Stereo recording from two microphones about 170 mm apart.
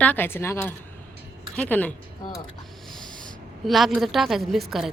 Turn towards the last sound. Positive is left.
turn(degrees=0)  # may be behind; listen again after turning